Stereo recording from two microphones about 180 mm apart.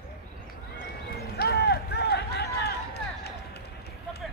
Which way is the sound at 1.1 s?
60° left (ahead or behind).